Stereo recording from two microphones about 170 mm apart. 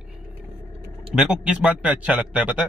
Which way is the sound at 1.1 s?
5° right (ahead or behind).